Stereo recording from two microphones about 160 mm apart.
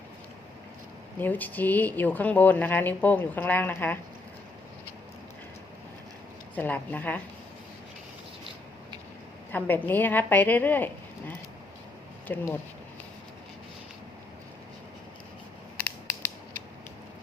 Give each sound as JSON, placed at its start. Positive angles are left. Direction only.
{"t": 1.2, "sound": "speech", "side_deg": 10}
{"t": 6.6, "sound": "speech", "side_deg": 10}
{"t": 9.5, "sound": "speech", "side_deg": 10}
{"t": 12.3, "sound": "speech", "side_deg": 10}